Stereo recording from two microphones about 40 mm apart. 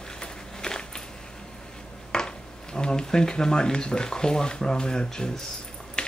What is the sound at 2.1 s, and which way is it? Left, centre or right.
Speech, centre.